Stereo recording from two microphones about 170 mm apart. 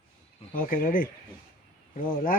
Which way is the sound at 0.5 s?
55° left (ahead or behind).